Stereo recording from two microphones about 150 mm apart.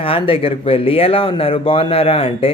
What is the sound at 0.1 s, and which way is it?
Speech, 40° left (ahead or behind).